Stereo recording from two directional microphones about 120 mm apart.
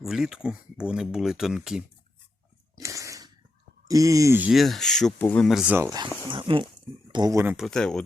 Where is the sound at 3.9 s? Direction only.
30° right (ahead or behind).